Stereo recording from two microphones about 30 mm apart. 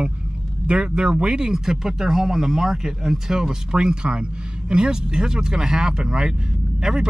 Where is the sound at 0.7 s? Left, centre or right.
Right.